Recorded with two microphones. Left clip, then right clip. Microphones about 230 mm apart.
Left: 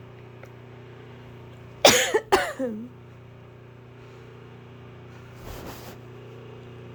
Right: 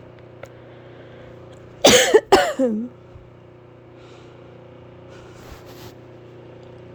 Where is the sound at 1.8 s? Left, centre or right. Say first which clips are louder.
Right 5 dB; right.